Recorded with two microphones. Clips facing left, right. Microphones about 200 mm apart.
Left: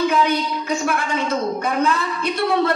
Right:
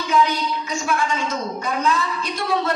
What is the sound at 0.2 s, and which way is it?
A woman's voice, 60° left (ahead or behind).